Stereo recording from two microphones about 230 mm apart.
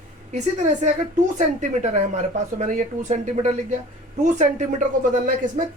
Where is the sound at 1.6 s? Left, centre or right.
Right.